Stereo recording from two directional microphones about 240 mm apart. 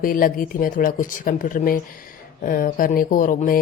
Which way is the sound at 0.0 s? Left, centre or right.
Left.